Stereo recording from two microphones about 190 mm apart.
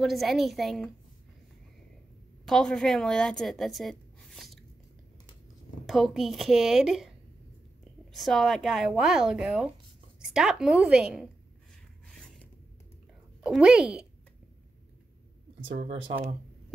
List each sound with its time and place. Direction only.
0.0 s speech: centre (ahead or behind)
2.4 s a woman's voice: 5° left (ahead or behind)
5.9 s speech: centre (ahead or behind)
8.1 s speech: centre (ahead or behind)
13.4 s speech: 5° right (ahead or behind)